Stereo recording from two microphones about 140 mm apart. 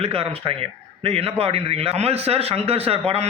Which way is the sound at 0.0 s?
40° right (ahead or behind).